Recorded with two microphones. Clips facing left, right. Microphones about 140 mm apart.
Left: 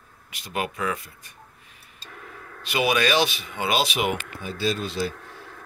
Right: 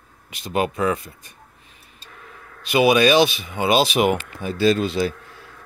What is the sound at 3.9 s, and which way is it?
Speech, 45° right (ahead or behind).